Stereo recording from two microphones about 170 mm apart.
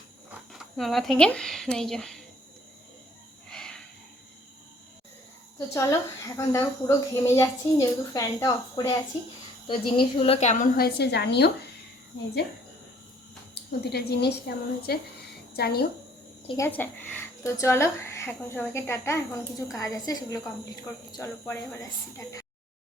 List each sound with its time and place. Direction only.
0.3 s speech: centre (ahead or behind)
3.5 s a sound: 5° left (ahead or behind)
5.5 s speech: 15° left (ahead or behind)
9.6 s a woman's voice: 30° left (ahead or behind)
10.8 s a woman's voice: 65° left (ahead or behind)
13.5 s a woman's voice: 75° left (ahead or behind)
16.6 s speech: 10° left (ahead or behind)